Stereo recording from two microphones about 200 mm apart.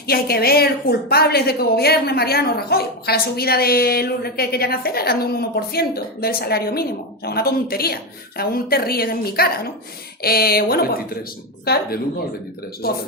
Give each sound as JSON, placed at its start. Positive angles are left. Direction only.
{"t": 0.1, "sound": "a woman's voice", "side_deg": 50}